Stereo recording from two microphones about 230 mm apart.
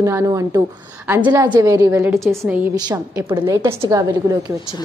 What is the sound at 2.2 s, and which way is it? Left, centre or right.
Speech, centre.